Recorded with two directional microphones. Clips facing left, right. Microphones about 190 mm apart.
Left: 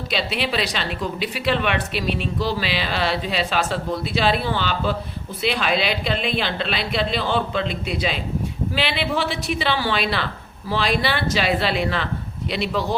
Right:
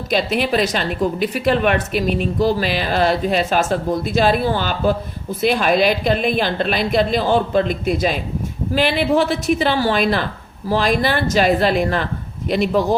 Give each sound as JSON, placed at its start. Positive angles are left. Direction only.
{"t": 0.1, "sound": "a woman's voice", "side_deg": -45}